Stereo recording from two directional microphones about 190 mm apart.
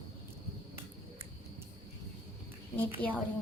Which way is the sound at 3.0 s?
5° left (ahead or behind).